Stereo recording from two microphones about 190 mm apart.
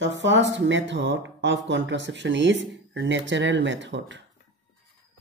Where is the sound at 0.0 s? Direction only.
70° right (ahead or behind).